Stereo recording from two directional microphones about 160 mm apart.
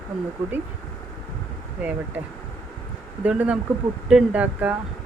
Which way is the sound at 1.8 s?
5° right (ahead or behind).